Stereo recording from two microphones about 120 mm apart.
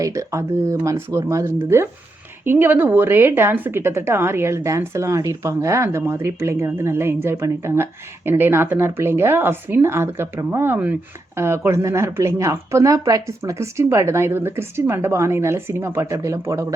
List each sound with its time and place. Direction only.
0.0 s a woman's voice: 25° right (ahead or behind)